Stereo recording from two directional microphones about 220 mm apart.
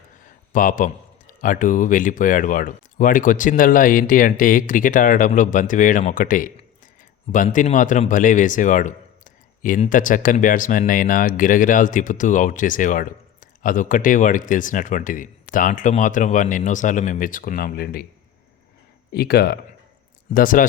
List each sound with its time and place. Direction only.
0.5 s a man's voice: 35° left (ahead or behind)
19.1 s a man's voice: 45° left (ahead or behind)